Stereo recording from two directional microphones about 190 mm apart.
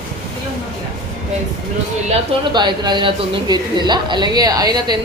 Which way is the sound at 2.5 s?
25° right (ahead or behind).